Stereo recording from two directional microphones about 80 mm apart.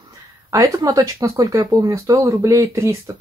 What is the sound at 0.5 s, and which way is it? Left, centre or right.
Speech, right.